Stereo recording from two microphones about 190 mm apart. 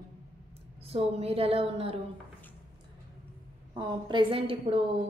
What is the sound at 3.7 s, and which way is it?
A woman's voice, 25° right (ahead or behind).